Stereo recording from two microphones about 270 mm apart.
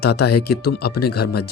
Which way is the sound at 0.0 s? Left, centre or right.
Left.